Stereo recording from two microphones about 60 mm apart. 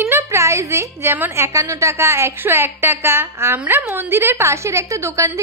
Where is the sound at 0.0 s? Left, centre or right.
Right.